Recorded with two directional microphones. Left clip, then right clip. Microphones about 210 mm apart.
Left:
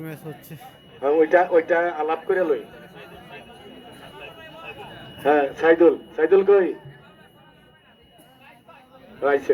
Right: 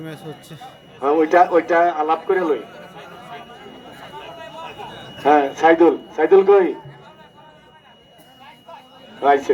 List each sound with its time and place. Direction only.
0.0 s a man's voice: 10° left (ahead or behind)
0.9 s a man's voice: 50° right (ahead or behind)
4.1 s a sound: 50° right (ahead or behind)
5.2 s a man's voice: 50° right (ahead or behind)
9.2 s a man's voice: 50° right (ahead or behind)